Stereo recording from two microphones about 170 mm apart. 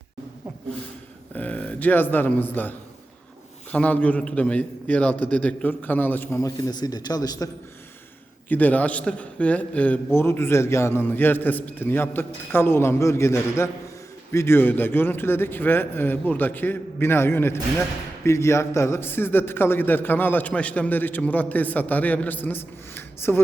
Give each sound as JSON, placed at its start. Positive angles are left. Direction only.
{"t": 1.3, "sound": "a man's voice", "side_deg": 10}
{"t": 8.4, "sound": "a man's voice", "side_deg": 10}